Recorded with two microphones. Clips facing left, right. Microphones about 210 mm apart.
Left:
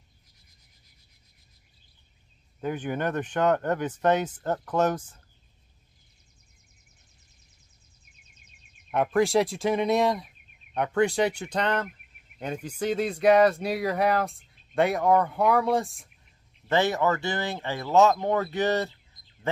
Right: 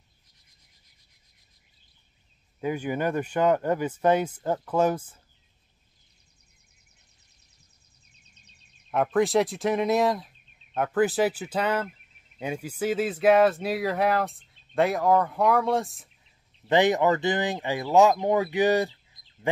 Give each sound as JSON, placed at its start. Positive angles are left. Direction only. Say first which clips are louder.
{"t": 2.6, "sound": "speech", "louder": "right 2 dB", "side_deg": -10}
{"t": 8.9, "sound": "speech", "louder": "even", "side_deg": 0}
{"t": 16.6, "sound": "speech", "louder": "right 3 dB", "side_deg": -15}